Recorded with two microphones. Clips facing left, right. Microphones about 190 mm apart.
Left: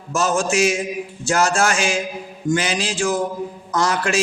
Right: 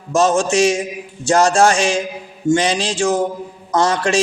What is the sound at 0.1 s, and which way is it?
A man's voice, 30° right (ahead or behind).